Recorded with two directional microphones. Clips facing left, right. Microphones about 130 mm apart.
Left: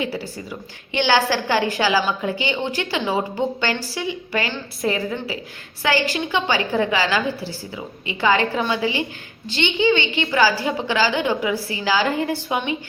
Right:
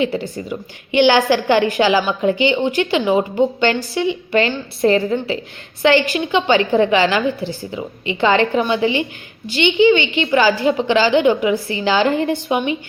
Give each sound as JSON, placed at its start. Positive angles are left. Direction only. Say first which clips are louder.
{"t": 0.0, "sound": "a woman's voice", "louder": "right 6 dB", "side_deg": -20}